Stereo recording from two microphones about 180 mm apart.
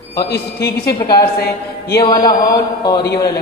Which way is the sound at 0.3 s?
60° left (ahead or behind).